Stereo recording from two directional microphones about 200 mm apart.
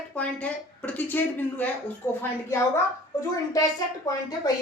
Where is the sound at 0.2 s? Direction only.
5° left (ahead or behind).